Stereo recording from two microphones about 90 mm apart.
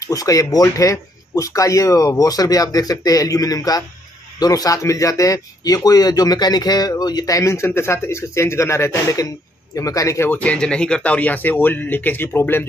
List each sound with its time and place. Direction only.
0.0 s speech: 40° left (ahead or behind)
10.4 s speech: 10° left (ahead or behind)